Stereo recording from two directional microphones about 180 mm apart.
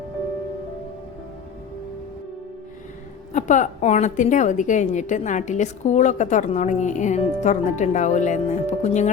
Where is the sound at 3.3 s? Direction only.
40° left (ahead or behind).